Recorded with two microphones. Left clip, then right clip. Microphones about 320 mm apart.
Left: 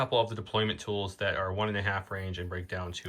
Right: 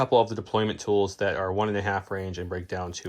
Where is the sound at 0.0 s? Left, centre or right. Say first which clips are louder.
Right 6 dB; centre.